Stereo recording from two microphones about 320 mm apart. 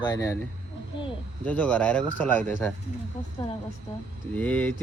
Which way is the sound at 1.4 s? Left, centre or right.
Centre.